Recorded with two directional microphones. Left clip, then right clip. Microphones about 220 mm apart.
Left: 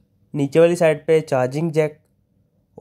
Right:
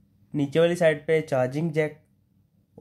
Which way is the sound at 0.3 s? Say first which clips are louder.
Left 7 dB; 30° left (ahead or behind).